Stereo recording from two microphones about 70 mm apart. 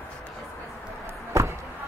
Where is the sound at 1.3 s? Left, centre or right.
Right.